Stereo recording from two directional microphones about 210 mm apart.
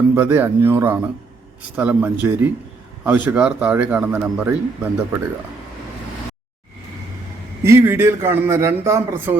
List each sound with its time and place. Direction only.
0.1 s a man's voice: 10° right (ahead or behind)
7.6 s a man's voice: 10° right (ahead or behind)